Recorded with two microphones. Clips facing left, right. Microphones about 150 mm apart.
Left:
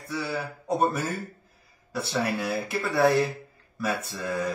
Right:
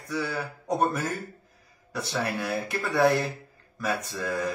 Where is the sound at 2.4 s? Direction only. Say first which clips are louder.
Left 1 dB; 5° left (ahead or behind).